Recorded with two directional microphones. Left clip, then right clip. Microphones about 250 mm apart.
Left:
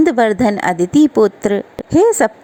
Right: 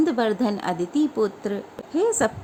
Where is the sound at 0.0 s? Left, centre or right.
Left.